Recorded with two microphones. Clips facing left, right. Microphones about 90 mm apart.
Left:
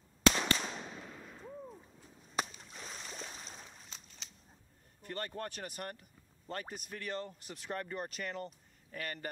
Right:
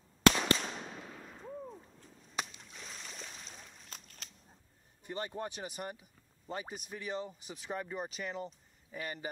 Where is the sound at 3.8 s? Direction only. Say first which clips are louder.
Right 2 dB; 50° right (ahead or behind).